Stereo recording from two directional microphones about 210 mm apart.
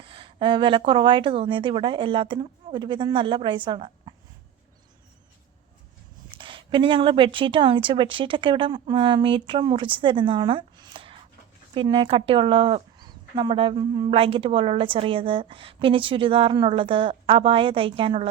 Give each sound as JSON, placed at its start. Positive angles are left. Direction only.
{"t": 0.0, "sound": "speech", "side_deg": -25}
{"t": 6.3, "sound": "speech", "side_deg": -25}